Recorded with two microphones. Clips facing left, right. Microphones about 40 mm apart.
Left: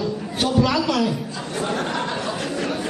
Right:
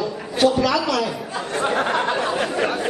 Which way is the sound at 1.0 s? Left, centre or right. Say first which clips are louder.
Even; right.